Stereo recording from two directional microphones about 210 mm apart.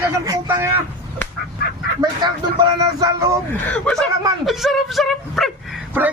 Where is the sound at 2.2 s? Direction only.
20° right (ahead or behind).